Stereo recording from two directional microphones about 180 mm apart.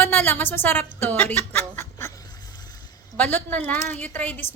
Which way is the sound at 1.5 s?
10° left (ahead or behind).